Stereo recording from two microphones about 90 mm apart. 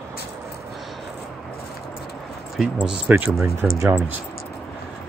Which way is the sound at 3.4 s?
25° right (ahead or behind).